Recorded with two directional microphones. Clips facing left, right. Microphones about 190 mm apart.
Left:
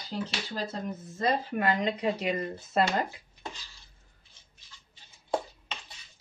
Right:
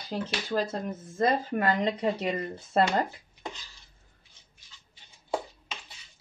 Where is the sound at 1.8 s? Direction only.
30° right (ahead or behind).